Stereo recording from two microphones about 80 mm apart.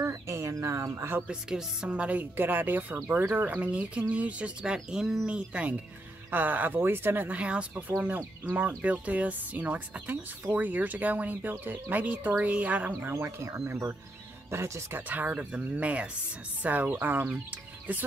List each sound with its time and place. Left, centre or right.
0.0 s speech: right
1.3 s speech: centre
4.7 s speech: centre
13.1 s speech: right